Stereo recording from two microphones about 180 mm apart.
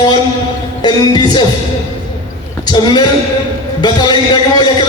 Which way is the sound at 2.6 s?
25° left (ahead or behind).